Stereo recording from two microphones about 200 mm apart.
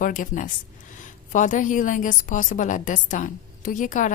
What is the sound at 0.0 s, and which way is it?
A woman's voice, 40° left (ahead or behind).